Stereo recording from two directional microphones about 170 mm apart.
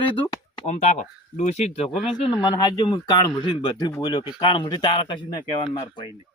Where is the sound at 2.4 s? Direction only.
25° left (ahead or behind).